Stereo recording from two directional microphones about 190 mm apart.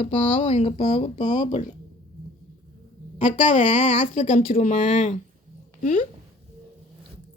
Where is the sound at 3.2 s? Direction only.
40° left (ahead or behind).